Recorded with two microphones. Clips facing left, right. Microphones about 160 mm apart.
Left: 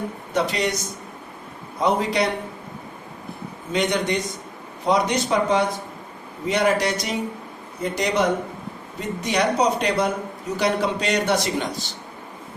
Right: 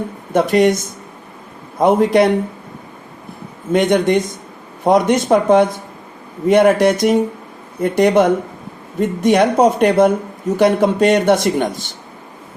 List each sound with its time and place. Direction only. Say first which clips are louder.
0.3 s speech: right 10 dB; 50° right (ahead or behind)
1.8 s speech: right 9 dB; 55° right (ahead or behind)
3.7 s speech: right 9 dB; 50° right (ahead or behind)